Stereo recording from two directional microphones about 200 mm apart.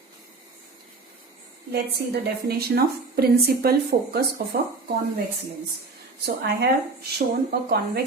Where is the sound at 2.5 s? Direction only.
50° right (ahead or behind).